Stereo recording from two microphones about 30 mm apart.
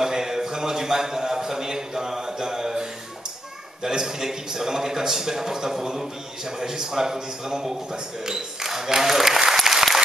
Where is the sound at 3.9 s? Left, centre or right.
Centre.